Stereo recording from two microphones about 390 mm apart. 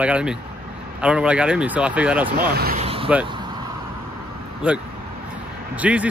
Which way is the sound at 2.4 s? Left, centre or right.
Right.